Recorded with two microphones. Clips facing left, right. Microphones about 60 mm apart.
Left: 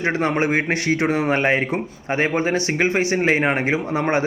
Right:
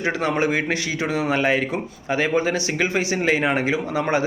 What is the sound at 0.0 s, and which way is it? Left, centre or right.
Speech, left.